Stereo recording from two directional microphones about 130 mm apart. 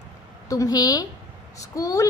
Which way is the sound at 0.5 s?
25° left (ahead or behind).